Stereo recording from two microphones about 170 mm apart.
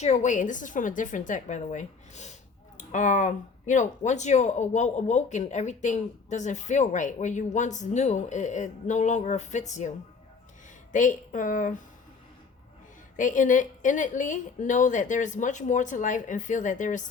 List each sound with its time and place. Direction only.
0.0 s speech: 45° left (ahead or behind)
10.9 s speech: 50° left (ahead or behind)
13.1 s speech: 50° left (ahead or behind)